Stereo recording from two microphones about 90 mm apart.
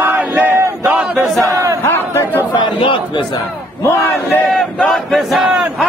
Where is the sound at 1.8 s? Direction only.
25° left (ahead or behind).